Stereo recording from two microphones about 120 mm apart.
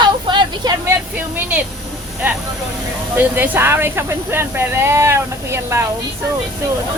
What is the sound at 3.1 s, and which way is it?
Speech, 15° right (ahead or behind).